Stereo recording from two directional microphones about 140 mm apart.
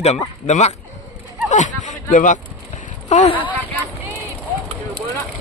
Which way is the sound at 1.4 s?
60° left (ahead or behind).